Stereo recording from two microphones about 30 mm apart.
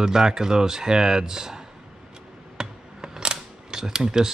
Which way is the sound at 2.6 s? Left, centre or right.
Centre.